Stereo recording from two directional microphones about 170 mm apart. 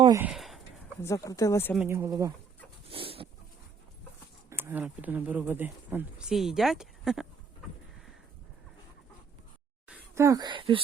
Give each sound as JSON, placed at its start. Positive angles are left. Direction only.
{"t": 0.2, "sound": "a sound", "side_deg": -5}
{"t": 1.0, "sound": "speech", "side_deg": 20}
{"t": 1.9, "sound": "speech", "side_deg": -15}
{"t": 2.9, "sound": "a sound", "side_deg": -35}
{"t": 4.4, "sound": "speech", "side_deg": -15}
{"t": 9.9, "sound": "speech", "side_deg": -15}